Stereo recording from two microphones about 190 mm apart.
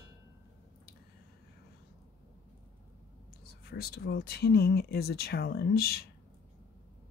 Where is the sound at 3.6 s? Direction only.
55° left (ahead or behind).